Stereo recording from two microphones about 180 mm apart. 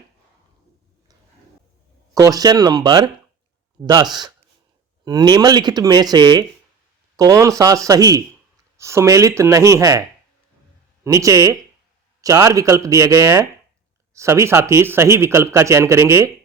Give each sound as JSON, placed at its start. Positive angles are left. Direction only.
{"t": 2.1, "sound": "speech", "side_deg": -20}